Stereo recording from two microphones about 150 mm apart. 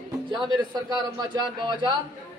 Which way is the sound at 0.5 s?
30° right (ahead or behind).